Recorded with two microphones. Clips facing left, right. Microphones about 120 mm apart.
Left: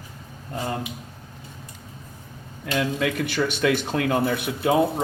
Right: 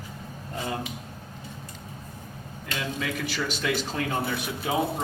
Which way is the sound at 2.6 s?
60° left (ahead or behind).